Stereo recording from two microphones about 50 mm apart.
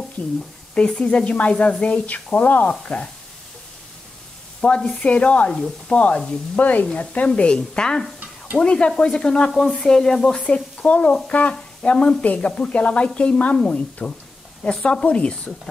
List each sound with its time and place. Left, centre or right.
0.7 s speech: left
2.7 s speech: centre
4.6 s speech: centre
8.5 s stir: left
10.4 s stir: left
11.2 s speech: left